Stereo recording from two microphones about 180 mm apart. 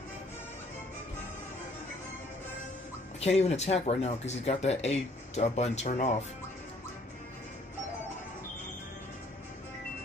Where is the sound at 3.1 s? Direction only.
35° left (ahead or behind).